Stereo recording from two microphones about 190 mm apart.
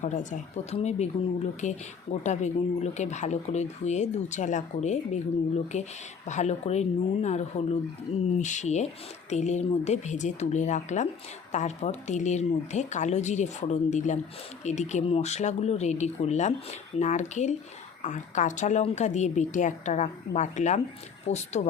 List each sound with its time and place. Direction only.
0.0 s speech: 40° left (ahead or behind)